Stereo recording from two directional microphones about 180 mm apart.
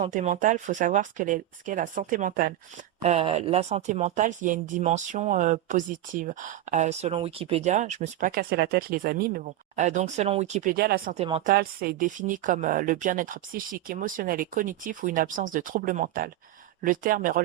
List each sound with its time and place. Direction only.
0.0 s speech: 45° right (ahead or behind)
3.0 s speech: 35° right (ahead or behind); by 9.5 s 55° right (ahead or behind)
9.7 s speech: 40° right (ahead or behind); by 11.1 s 60° right (ahead or behind)
11.1 s speech: 35° right (ahead or behind)
11.4 s speech: 55° right (ahead or behind)